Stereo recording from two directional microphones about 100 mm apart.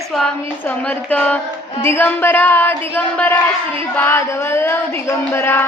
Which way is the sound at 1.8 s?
20° left (ahead or behind).